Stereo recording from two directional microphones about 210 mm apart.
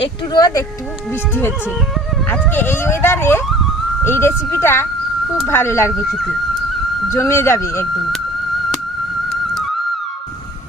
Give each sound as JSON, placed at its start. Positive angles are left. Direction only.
{"t": 0.0, "sound": "speech", "side_deg": 20}
{"t": 7.1, "sound": "speech", "side_deg": 15}